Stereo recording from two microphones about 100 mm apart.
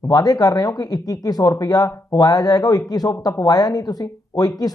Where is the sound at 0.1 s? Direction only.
40° left (ahead or behind).